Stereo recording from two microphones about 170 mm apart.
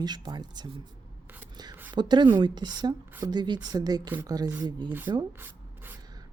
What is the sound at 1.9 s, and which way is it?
Speech, 25° right (ahead or behind).